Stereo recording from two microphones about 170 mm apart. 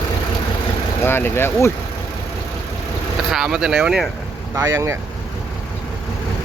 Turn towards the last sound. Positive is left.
turn(degrees=-15)  # may be behind; listen again after turning